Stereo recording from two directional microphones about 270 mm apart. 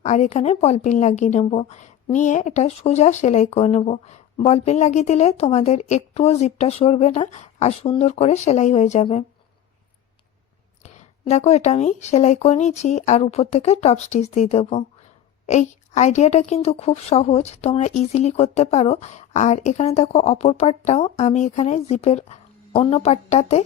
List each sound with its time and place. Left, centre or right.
0.0 s a woman's voice: left
10.8 s a woman's voice: left